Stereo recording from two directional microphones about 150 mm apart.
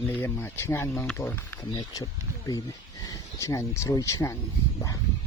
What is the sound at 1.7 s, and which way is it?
Speech, 25° left (ahead or behind).